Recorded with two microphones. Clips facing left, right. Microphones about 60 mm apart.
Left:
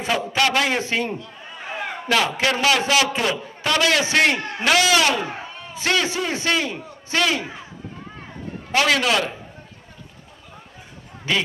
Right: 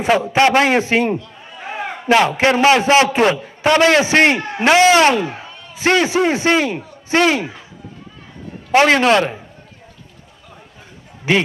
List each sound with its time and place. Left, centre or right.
0.0 s a man's voice: right
1.7 s a sound: centre
2.3 s a man's voice: right
8.7 s a man's voice: right